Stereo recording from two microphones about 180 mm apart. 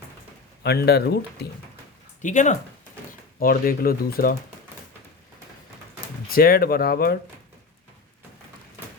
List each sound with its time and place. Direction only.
0.6 s speech: 65° left (ahead or behind)
2.2 s speech: 40° left (ahead or behind)
3.4 s speech: 55° left (ahead or behind)
6.3 s speech: 55° left (ahead or behind)